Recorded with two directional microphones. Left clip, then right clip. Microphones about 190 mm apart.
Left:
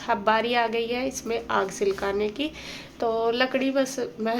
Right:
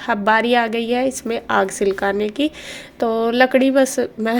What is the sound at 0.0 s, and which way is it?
A woman's voice, 30° right (ahead or behind).